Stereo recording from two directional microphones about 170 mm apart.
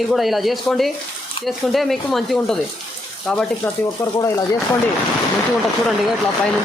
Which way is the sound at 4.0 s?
15° left (ahead or behind).